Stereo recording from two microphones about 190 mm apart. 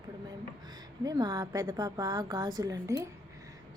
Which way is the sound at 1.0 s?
20° right (ahead or behind).